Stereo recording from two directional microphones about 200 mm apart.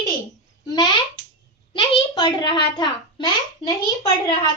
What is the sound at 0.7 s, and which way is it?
A child's voice, 20° left (ahead or behind).